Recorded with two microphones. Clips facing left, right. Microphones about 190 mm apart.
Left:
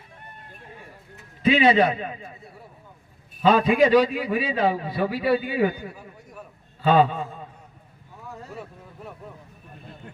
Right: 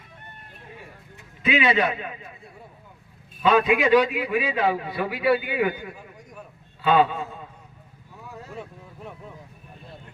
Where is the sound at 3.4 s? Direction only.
35° left (ahead or behind).